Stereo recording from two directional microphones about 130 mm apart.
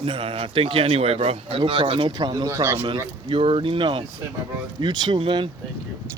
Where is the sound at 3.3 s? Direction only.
45° right (ahead or behind).